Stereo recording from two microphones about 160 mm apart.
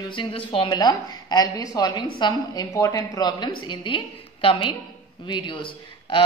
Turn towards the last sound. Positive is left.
turn(degrees=30)  # may be behind; listen again after turning